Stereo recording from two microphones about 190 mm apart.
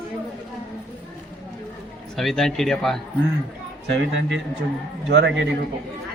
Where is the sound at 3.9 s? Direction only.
70° right (ahead or behind).